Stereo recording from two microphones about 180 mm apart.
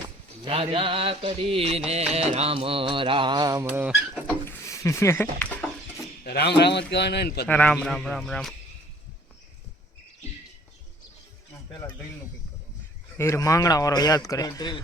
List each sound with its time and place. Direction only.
0.4 s music: 30° right (ahead or behind)
3.7 s speech: 10° right (ahead or behind)
4.4 s a sound: 15° left (ahead or behind)
6.2 s a man's voice: 65° left (ahead or behind)
7.4 s a man's voice: 5° left (ahead or behind)
13.1 s speech: 15° left (ahead or behind)